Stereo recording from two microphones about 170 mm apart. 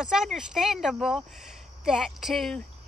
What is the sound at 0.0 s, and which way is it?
Speech, centre (ahead or behind).